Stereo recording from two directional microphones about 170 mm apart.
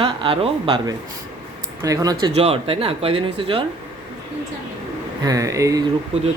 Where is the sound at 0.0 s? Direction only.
30° right (ahead or behind).